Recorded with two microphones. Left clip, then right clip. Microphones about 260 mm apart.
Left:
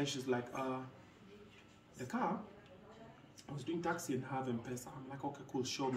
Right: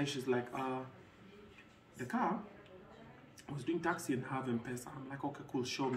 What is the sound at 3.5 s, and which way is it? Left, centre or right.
Speech, centre.